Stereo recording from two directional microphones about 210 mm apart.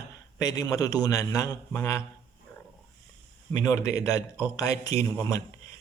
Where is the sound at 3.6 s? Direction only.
15° left (ahead or behind).